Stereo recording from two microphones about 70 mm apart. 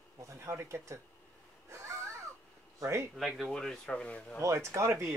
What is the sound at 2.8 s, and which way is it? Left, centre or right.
Speech, right.